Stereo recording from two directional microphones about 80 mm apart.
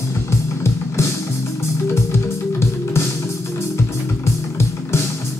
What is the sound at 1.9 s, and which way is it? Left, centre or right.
Music, left.